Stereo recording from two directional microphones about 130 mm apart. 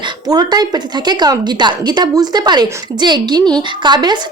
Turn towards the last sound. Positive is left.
turn(degrees=-35)  # may be behind; listen again after turning